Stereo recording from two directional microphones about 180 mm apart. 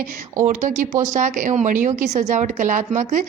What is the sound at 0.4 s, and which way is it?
A woman's voice, 45° right (ahead or behind).